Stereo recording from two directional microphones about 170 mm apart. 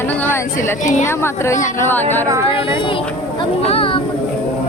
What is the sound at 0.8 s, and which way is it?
Speech, 45° left (ahead or behind).